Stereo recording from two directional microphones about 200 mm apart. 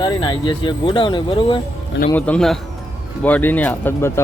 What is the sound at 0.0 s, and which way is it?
Speech, 25° left (ahead or behind).